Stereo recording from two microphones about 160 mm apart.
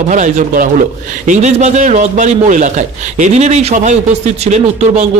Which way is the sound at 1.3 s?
45° right (ahead or behind).